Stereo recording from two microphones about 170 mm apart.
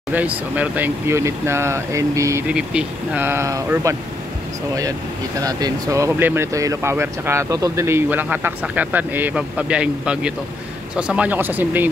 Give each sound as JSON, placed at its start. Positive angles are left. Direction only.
{"t": 0.1, "sound": "speech", "side_deg": -10}
{"t": 2.4, "sound": "speech", "side_deg": -5}
{"t": 5.4, "sound": "speech", "side_deg": -20}